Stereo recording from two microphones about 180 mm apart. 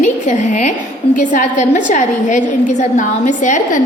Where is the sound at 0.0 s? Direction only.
45° left (ahead or behind).